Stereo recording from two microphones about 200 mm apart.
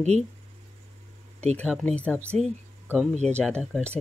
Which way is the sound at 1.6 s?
5° left (ahead or behind).